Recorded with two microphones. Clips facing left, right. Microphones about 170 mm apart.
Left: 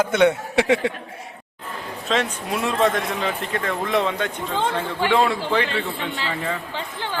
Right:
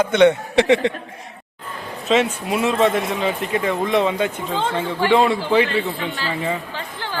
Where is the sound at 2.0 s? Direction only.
5° right (ahead or behind).